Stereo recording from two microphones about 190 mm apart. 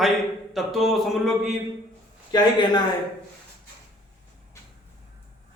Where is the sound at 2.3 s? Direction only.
20° left (ahead or behind).